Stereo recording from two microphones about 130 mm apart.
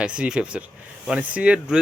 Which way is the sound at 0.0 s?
10° right (ahead or behind).